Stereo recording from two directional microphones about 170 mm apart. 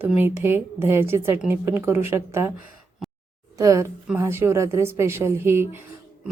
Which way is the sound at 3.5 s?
20° right (ahead or behind).